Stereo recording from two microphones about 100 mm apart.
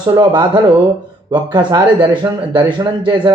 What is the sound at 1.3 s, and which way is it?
Speech, 50° right (ahead or behind).